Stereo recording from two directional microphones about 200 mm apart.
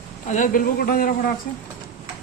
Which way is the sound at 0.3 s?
40° left (ahead or behind).